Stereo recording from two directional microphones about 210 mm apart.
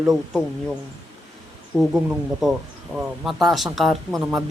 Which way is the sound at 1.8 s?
Centre (ahead or behind).